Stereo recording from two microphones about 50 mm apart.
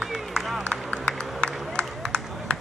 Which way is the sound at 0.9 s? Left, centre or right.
Centre.